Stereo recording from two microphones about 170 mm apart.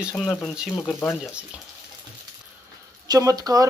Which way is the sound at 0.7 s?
10° left (ahead or behind).